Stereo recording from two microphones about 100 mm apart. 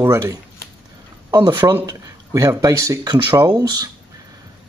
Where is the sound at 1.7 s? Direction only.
35° right (ahead or behind).